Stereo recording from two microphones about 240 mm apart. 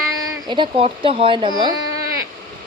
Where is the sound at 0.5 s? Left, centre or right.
Right.